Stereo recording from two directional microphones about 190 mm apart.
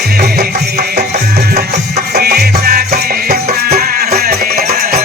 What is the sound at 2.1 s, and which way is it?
Music, 55° right (ahead or behind).